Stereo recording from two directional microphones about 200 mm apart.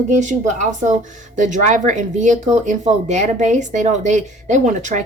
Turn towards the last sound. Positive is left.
turn(degrees=-35)  # may be behind; listen again after turning